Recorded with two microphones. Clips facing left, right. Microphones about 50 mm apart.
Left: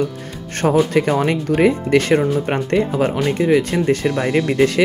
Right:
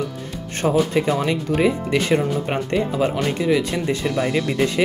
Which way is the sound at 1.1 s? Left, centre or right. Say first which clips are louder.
Left 3 dB; left.